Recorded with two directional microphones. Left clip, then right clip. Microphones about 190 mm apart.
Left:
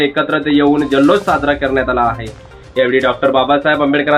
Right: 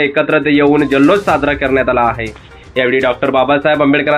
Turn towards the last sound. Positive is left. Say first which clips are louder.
# right 1 dB
turn(degrees=-20)  # may be behind; listen again after turning